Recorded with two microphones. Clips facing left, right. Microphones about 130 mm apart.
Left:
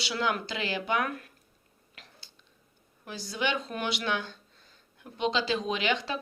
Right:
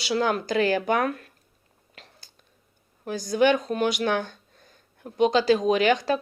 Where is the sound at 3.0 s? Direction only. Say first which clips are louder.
Right 11 dB; 45° right (ahead or behind).